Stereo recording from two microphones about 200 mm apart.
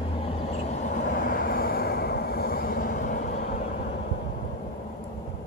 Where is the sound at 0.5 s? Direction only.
35° left (ahead or behind).